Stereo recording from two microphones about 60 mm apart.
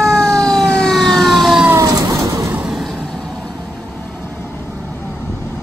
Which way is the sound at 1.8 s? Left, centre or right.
Right.